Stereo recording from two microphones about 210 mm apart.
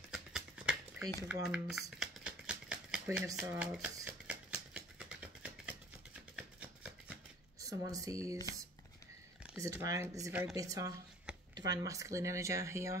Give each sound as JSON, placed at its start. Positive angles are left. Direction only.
{"t": 0.1, "sound": "a sound", "side_deg": -5}
{"t": 7.6, "sound": "speech", "side_deg": -15}
{"t": 9.6, "sound": "speech", "side_deg": -15}